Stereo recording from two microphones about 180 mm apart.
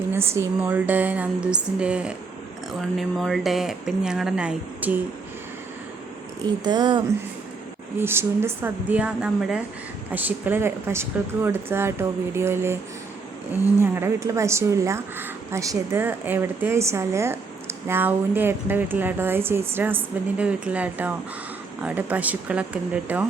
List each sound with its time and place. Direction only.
0.1 s speech: 15° right (ahead or behind)
6.4 s speech: 25° right (ahead or behind)
7.9 s speech: 15° right (ahead or behind)